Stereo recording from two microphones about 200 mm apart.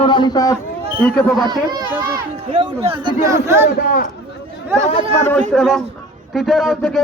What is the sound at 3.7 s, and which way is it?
Speech, 45° left (ahead or behind).